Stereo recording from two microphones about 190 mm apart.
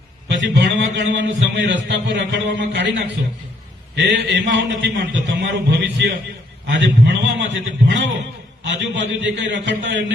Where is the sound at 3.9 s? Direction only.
65° right (ahead or behind).